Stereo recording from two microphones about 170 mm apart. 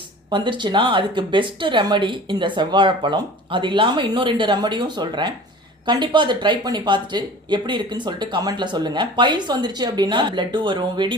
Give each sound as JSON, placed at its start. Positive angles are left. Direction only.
{"t": 0.3, "sound": "speech", "side_deg": -25}